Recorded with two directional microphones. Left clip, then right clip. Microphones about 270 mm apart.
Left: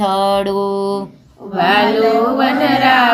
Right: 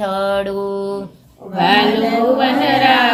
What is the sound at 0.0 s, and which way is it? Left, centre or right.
Mantra, left.